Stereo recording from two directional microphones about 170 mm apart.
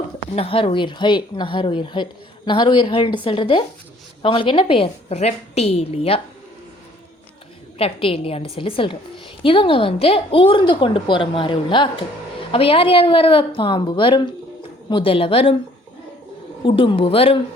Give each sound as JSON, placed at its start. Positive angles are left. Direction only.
{"t": 0.3, "sound": "a woman's voice", "side_deg": 35}
{"t": 7.8, "sound": "a woman's voice", "side_deg": 35}
{"t": 16.6, "sound": "a woman's voice", "side_deg": 30}